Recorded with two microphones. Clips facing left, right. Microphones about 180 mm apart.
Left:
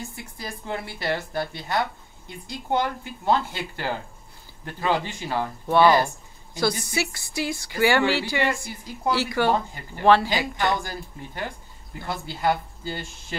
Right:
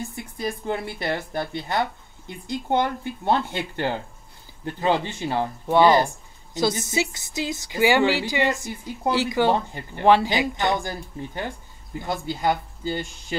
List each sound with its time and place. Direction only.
0.1 s speech: 20° right (ahead or behind)